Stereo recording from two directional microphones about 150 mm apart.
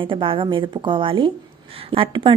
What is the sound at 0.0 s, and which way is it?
A woman's voice, 35° right (ahead or behind).